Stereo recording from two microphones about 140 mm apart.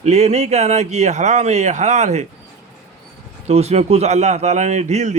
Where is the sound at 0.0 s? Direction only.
50° right (ahead or behind).